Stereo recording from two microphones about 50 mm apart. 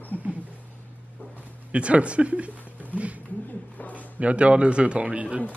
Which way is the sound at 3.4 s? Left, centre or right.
Left.